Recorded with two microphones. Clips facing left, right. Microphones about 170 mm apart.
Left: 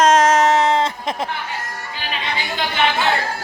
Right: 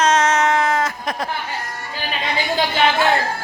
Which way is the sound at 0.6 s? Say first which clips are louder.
Left 3 dB; 30° left (ahead or behind).